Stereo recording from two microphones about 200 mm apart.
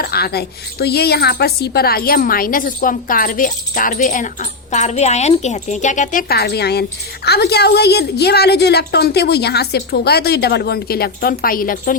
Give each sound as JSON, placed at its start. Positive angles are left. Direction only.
{"t": 0.0, "sound": "speech", "side_deg": 50}